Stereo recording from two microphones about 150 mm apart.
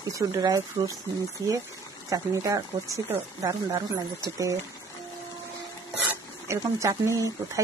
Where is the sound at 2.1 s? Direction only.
20° right (ahead or behind).